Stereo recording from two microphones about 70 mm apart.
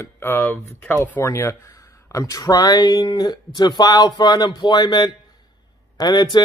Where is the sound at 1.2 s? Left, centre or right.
Left.